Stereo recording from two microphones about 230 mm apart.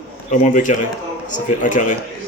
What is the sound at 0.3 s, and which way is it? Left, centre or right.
Speech, left.